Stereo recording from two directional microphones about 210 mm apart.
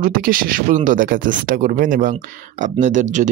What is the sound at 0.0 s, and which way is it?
Speech, 45° right (ahead or behind).